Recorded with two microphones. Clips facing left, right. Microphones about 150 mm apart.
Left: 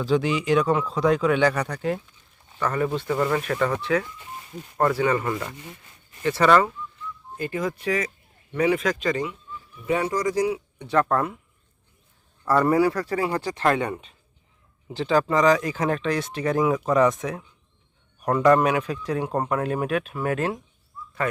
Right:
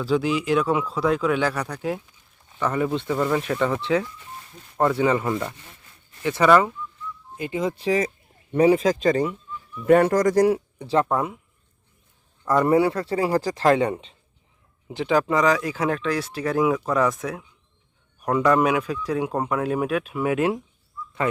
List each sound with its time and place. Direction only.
0.0 s speech: 5° right (ahead or behind)
3.1 s speech: 5° right (ahead or behind)
3.8 s speech: 25° right (ahead or behind)
9.8 s speech: 55° right (ahead or behind)
10.8 s speech: 30° right (ahead or behind)
11.0 s speech: 15° right (ahead or behind)
12.5 s speech: 20° right (ahead or behind)
14.8 s speech: 10° right (ahead or behind)